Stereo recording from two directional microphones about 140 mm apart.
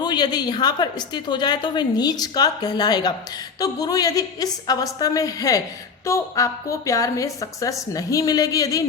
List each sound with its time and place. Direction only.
0.0 s a woman's voice: 30° left (ahead or behind)